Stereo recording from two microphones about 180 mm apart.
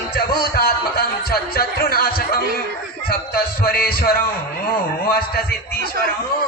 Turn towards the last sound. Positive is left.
turn(degrees=60)  # may be behind; listen again after turning